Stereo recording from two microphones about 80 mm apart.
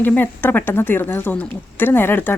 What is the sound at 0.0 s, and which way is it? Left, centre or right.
Speech, left.